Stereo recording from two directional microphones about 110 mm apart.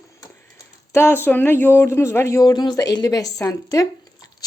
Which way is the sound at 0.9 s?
20° left (ahead or behind).